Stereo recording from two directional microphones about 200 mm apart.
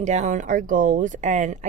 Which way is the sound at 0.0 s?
35° right (ahead or behind).